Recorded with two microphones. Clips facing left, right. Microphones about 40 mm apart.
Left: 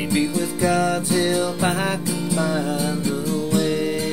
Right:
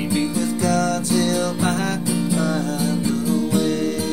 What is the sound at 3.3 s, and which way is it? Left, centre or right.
Music, centre.